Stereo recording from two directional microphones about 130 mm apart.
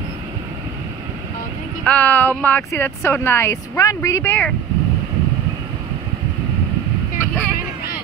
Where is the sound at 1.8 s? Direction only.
10° left (ahead or behind).